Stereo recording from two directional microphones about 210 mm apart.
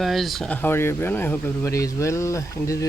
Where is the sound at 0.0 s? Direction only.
Centre (ahead or behind).